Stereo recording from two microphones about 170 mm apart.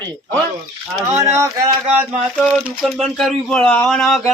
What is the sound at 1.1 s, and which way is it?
Speech, 15° right (ahead or behind).